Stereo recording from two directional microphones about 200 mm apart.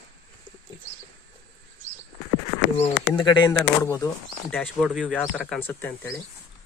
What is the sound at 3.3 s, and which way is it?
Speech, 20° left (ahead or behind).